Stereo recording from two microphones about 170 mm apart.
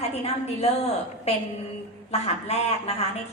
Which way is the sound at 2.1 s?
40° left (ahead or behind).